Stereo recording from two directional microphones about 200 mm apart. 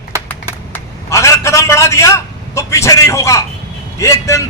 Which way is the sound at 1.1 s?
15° left (ahead or behind).